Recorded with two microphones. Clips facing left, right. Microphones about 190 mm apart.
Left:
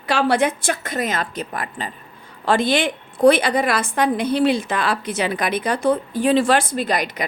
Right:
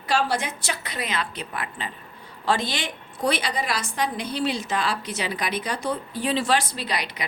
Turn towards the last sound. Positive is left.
turn(degrees=45)  # may be behind; listen again after turning